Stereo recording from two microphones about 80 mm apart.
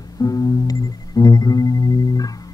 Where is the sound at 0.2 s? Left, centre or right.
Left.